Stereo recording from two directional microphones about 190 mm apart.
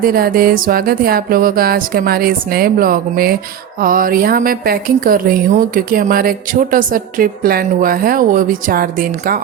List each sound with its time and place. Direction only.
0.0 s a woman's voice: 50° right (ahead or behind)